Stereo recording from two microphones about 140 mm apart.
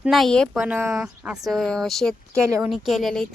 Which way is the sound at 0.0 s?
Centre (ahead or behind).